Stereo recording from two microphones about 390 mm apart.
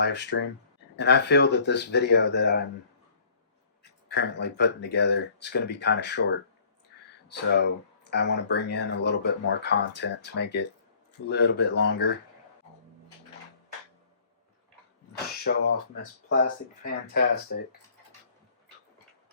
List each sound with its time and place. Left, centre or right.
0.0 s speech: left
4.1 s speech: left
15.5 s speech: left
16.8 s speech: left